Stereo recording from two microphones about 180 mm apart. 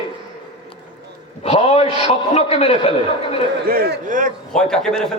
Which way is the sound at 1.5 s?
35° left (ahead or behind).